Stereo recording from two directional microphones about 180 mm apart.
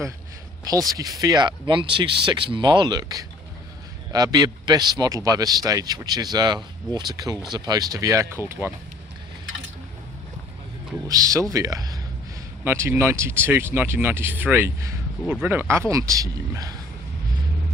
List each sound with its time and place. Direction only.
0.6 s a man's voice: 20° right (ahead or behind)
11.1 s a man's voice: 20° right (ahead or behind)